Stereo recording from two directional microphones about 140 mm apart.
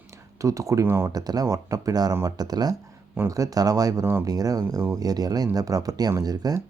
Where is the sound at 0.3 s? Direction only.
25° right (ahead or behind).